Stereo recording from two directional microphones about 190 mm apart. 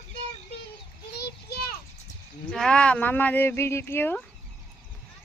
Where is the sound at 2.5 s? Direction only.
5° left (ahead or behind).